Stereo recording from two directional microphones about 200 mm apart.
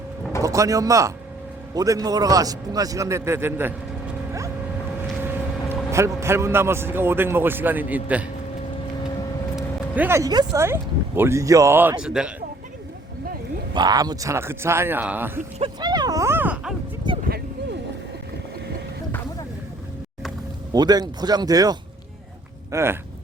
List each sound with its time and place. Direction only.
0.4 s speech: 15° right (ahead or behind)
4.3 s boat: 15° right (ahead or behind)
5.2 s a man's voice: 10° right (ahead or behind)
9.6 s speech: 10° right (ahead or behind)
13.7 s speech: 20° right (ahead or behind)
15.5 s a sound: 25° right (ahead or behind); by 16.7 s 10° right (ahead or behind)
17.1 s a sound: 20° right (ahead or behind)
20.7 s speech: 20° right (ahead or behind)